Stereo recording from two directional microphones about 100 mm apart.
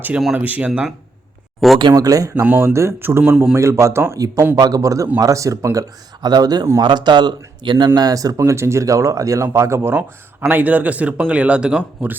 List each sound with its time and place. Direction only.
0.3 s a man's voice: 15° right (ahead or behind)
0.7 s speech: 5° right (ahead or behind)
1.8 s speech: 40° right (ahead or behind)
2.3 s speech: 20° right (ahead or behind)
3.2 s a man's voice: 10° right (ahead or behind)
3.5 s a man's voice: 30° right (ahead or behind); by 7.9 s 50° right (ahead or behind)
7.9 s a man's voice: 40° right (ahead or behind); by 12.1 s 10° right (ahead or behind)